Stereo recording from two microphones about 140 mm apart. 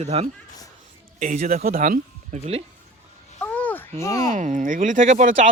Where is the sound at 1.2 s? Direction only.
65° right (ahead or behind).